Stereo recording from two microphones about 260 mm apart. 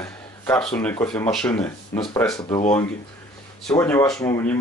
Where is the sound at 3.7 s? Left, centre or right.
Centre.